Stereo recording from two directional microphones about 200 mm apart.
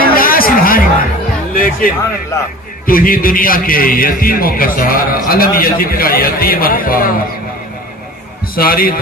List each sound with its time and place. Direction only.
0.1 s music: 45° left (ahead or behind)
2.3 s a man's voice: 15° left (ahead or behind)
2.8 s a man's voice: 45° left (ahead or behind)
8.5 s a man's voice: 45° left (ahead or behind)